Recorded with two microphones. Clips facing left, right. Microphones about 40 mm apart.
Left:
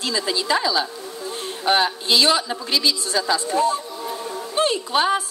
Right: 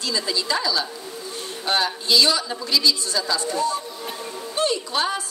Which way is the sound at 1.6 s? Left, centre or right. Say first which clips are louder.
Left 4 dB; left.